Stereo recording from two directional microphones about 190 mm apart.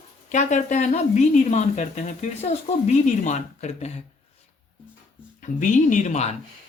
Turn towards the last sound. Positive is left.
turn(degrees=35)  # may be behind; listen again after turning